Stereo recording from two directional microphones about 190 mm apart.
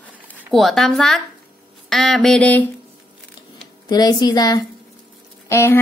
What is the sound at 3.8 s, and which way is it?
Speech, 20° left (ahead or behind).